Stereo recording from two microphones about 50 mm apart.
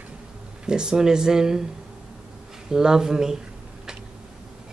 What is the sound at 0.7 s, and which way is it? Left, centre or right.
Speech, centre.